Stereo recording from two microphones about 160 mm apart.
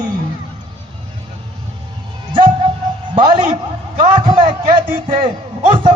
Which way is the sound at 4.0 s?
30° right (ahead or behind).